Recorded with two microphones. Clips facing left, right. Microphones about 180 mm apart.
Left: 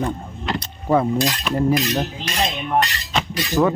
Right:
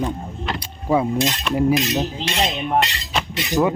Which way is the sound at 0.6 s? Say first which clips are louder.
Left 1 dB; 10° right (ahead or behind).